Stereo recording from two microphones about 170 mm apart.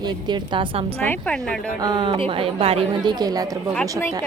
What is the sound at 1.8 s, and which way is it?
A woman's voice, 25° right (ahead or behind).